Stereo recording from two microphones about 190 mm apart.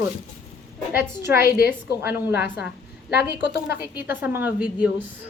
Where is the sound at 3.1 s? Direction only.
55° left (ahead or behind).